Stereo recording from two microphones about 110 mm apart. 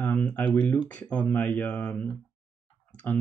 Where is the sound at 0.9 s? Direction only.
10° left (ahead or behind).